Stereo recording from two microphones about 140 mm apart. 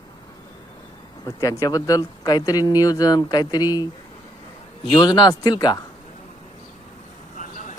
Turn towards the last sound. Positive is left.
turn(degrees=65)  # may be behind; listen again after turning